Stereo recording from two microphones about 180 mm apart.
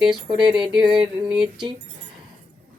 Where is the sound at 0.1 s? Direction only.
25° right (ahead or behind).